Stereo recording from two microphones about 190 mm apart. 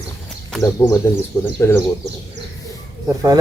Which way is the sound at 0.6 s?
15° left (ahead or behind).